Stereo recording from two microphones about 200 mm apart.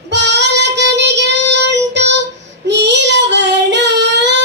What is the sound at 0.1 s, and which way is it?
Child singing, 60° right (ahead or behind).